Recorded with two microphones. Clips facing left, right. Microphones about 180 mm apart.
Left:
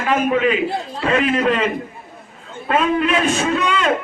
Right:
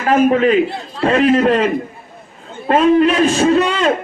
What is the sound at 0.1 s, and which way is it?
A man's voice, 40° right (ahead or behind).